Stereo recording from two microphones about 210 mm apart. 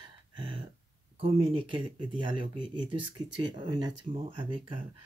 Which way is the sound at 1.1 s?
25° right (ahead or behind).